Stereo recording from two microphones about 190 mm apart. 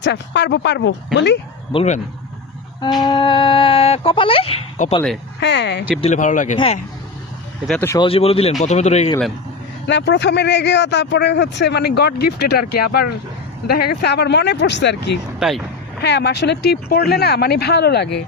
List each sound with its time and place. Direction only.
0.0 s a man's voice: 65° left (ahead or behind)
1.7 s speech: 35° left (ahead or behind)
2.8 s speech: 20° left (ahead or behind)
5.4 s a man's voice: 65° left (ahead or behind)
6.0 s speech: 40° left (ahead or behind)
7.8 s speech: 15° left (ahead or behind)
8.0 s speech: 30° left (ahead or behind)
9.8 s a man's voice: 65° left (ahead or behind)
15.4 s speech: centre (ahead or behind)
16.0 s a man's voice: 60° left (ahead or behind)